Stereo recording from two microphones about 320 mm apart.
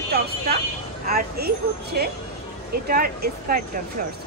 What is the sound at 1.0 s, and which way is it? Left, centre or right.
Speech, right.